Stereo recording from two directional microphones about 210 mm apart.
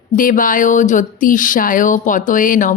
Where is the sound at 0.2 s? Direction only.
40° left (ahead or behind).